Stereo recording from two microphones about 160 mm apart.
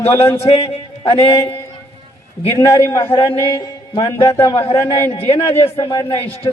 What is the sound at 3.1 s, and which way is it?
A man's voice, 35° left (ahead or behind).